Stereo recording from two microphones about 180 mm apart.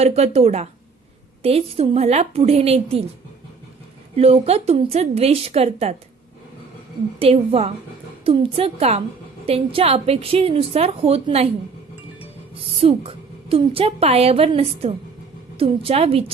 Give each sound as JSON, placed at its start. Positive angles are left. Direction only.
{"t": 0.0, "sound": "a woman's voice", "side_deg": -35}
{"t": 4.2, "sound": "a woman's voice", "side_deg": -35}
{"t": 7.2, "sound": "a woman's voice", "side_deg": -35}
{"t": 12.8, "sound": "a woman's voice", "side_deg": -30}